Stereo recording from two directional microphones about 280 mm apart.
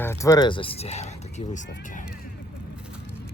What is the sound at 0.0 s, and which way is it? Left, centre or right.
Speech, centre.